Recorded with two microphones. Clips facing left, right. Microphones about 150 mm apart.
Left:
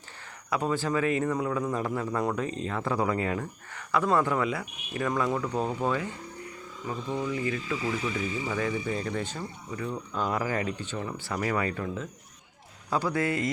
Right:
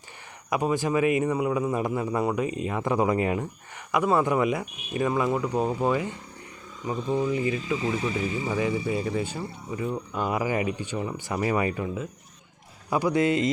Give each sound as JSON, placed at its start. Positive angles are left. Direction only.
{"t": 0.5, "sound": "a man's voice", "side_deg": -15}